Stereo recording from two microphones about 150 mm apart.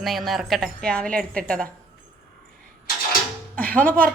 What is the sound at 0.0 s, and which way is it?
A woman's voice, centre (ahead or behind).